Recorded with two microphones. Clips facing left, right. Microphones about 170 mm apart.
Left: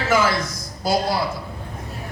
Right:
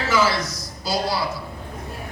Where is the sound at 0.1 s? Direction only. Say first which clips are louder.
Left 1 dB; 50° left (ahead or behind).